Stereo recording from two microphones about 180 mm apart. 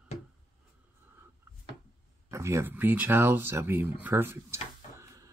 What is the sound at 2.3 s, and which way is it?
Speech, 15° right (ahead or behind).